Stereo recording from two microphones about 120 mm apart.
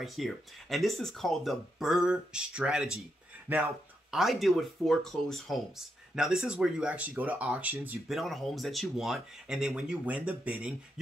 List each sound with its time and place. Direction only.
0.0 s speech: centre (ahead or behind)
3.4 s speech: 15° right (ahead or behind)
4.1 s speech: centre (ahead or behind)
8.1 s speech: centre (ahead or behind)